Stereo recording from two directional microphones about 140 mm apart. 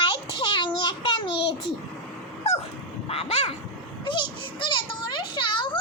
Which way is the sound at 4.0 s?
35° left (ahead or behind).